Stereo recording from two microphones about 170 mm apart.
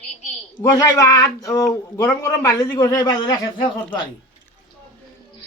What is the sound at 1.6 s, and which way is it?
Speech, 5° left (ahead or behind).